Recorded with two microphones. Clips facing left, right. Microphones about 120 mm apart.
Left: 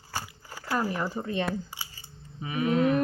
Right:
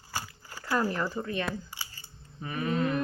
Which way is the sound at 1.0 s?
25° left (ahead or behind).